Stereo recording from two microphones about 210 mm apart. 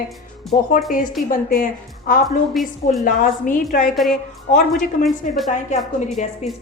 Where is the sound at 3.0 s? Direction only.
40° left (ahead or behind).